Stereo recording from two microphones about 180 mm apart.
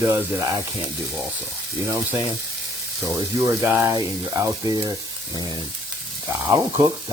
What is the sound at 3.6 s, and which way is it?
Speech, 15° right (ahead or behind).